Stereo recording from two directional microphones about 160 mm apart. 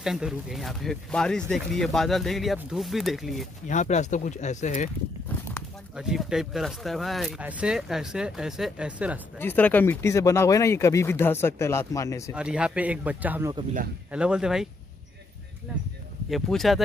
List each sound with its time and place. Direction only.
0.0 s speech: 5° right (ahead or behind)
3.6 s speech: 50° left (ahead or behind)
5.9 s speech: 5° right (ahead or behind)
9.4 s speech: 10° left (ahead or behind)
12.4 s speech: 5° right (ahead or behind)
16.3 s speech: centre (ahead or behind)